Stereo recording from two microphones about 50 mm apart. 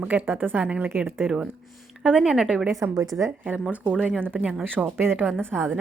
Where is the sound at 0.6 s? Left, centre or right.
Right.